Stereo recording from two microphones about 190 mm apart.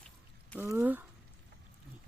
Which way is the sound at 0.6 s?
10° right (ahead or behind).